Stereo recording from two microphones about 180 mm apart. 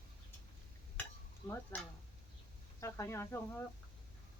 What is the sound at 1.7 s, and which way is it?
Speech, 10° left (ahead or behind).